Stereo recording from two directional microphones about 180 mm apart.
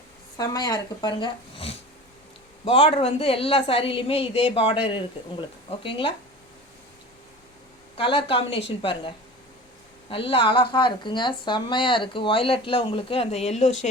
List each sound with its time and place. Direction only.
0.3 s a woman's voice: 20° left (ahead or behind)
7.9 s speech: 30° left (ahead or behind)